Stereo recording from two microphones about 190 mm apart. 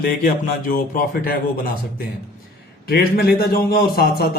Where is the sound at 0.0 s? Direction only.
45° left (ahead or behind).